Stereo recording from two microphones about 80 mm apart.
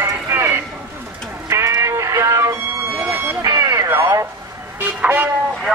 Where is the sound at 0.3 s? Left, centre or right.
Right.